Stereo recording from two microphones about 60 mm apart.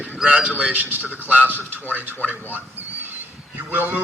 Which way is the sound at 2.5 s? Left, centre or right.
Right.